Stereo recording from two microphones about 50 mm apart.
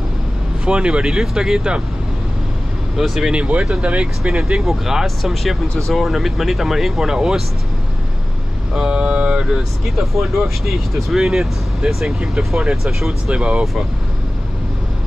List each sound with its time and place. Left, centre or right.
0.7 s speech: right
3.0 s speech: centre
3.3 s speech: right
4.2 s speech: centre
8.7 s speech: centre
9.6 s speech: centre
11.2 s speech: centre
13.3 s speech: right